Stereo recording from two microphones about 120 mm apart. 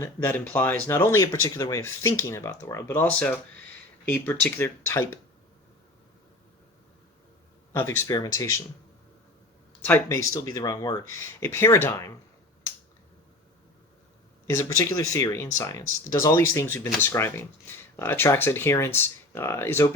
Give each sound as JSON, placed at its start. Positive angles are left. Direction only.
{"t": 0.0, "sound": "speech", "side_deg": 15}
{"t": 7.7, "sound": "speech", "side_deg": 20}
{"t": 9.8, "sound": "speech", "side_deg": 20}
{"t": 14.4, "sound": "speech", "side_deg": 25}